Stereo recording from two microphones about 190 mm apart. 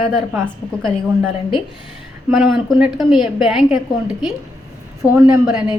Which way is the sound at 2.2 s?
Centre (ahead or behind).